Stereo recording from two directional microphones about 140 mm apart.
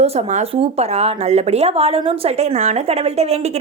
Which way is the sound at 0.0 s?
50° right (ahead or behind).